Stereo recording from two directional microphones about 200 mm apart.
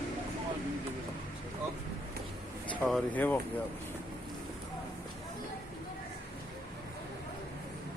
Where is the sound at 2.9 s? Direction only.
10° left (ahead or behind).